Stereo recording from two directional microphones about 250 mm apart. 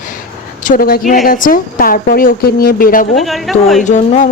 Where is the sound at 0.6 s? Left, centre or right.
Left.